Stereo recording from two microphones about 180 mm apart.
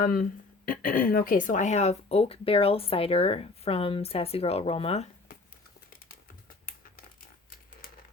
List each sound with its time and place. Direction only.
0.0 s speech: 55° left (ahead or behind); by 5.0 s 35° left (ahead or behind)